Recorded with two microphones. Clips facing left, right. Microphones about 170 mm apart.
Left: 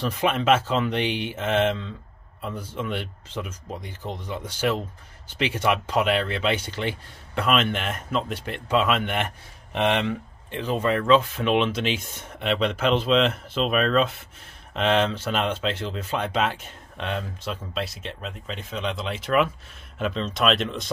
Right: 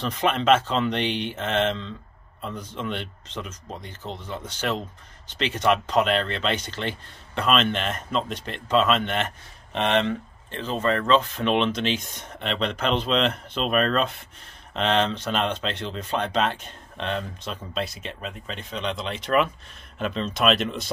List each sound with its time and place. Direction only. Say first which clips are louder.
0.0 s speech: even; 5° left (ahead or behind)